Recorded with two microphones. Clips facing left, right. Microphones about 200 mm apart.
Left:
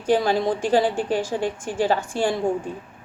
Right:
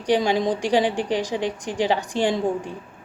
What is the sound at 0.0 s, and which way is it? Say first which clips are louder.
A woman's voice: even; 15° right (ahead or behind).